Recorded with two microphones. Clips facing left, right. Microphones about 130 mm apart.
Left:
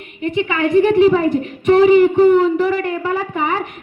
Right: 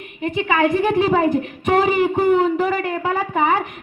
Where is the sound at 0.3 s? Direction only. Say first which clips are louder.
Even; 50° right (ahead or behind).